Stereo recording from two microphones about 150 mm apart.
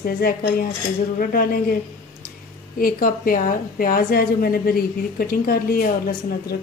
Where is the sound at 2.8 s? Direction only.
70° left (ahead or behind).